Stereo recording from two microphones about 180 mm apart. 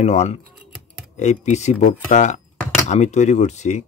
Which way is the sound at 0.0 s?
40° left (ahead or behind).